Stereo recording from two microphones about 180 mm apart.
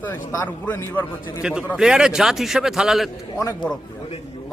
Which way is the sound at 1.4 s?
5° right (ahead or behind).